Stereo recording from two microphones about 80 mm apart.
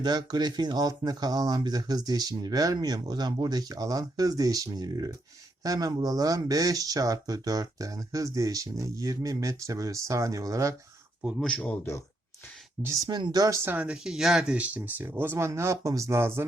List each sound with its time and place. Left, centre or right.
0.0 s speech: right
11.3 s a man's voice: centre
13.1 s speech: right
13.7 s speech: centre; by 16.5 s right